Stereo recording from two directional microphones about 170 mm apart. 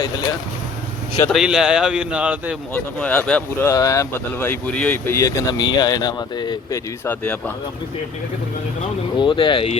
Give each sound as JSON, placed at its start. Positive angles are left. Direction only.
{"t": 1.3, "sound": "a man's voice", "side_deg": -5}
{"t": 2.7, "sound": "speech", "side_deg": 10}
{"t": 3.7, "sound": "speech", "side_deg": 20}
{"t": 9.1, "sound": "speech", "side_deg": 30}